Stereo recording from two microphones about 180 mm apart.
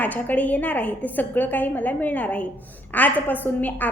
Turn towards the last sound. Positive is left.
turn(degrees=10)  # may be behind; listen again after turning